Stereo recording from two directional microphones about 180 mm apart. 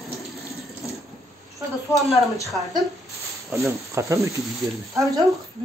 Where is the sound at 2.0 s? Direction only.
Centre (ahead or behind).